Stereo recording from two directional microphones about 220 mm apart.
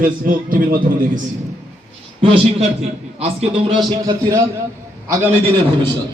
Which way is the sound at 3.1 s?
25° right (ahead or behind).